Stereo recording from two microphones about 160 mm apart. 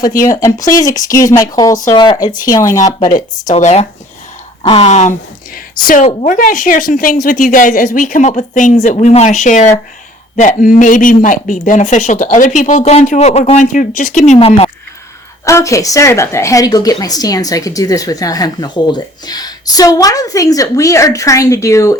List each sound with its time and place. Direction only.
0.3 s a woman's voice: 20° left (ahead or behind)
2.8 s speech: 50° left (ahead or behind)
14.3 s speech: 35° left (ahead or behind)
15.4 s a woman's voice: 20° left (ahead or behind)